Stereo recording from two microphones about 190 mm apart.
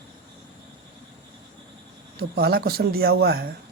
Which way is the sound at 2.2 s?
55° right (ahead or behind).